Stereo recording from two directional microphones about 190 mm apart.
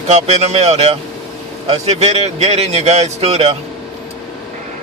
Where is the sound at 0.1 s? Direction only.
35° right (ahead or behind).